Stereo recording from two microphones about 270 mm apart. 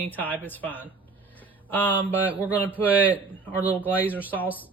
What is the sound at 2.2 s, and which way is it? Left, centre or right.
Speech, centre.